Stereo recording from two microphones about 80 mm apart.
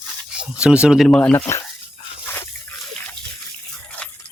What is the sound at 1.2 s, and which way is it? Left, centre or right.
Speech, centre.